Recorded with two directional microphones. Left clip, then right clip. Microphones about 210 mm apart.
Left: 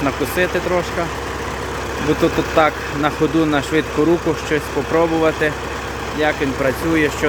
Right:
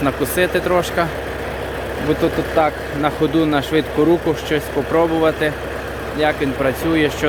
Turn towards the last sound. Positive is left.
turn(degrees=-5)  # may be behind; listen again after turning